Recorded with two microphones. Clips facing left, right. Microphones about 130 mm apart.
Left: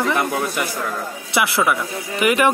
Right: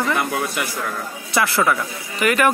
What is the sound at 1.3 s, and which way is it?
Speech, 15° left (ahead or behind).